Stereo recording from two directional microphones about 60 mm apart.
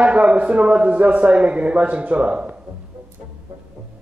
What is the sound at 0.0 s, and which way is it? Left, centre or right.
A man's voice, right.